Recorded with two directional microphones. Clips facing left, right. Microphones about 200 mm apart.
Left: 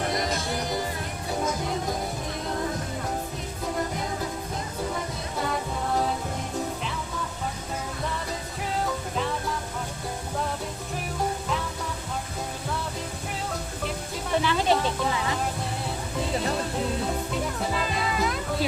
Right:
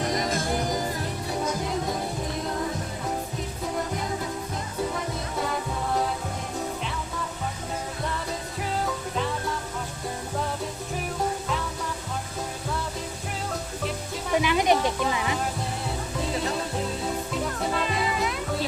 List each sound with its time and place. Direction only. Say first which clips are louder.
0.3 s music: right 2 dB; 50° right (ahead or behind)
14.3 s music: right 2 dB; 15° right (ahead or behind)
17.3 s music: right 1 dB; centre (ahead or behind)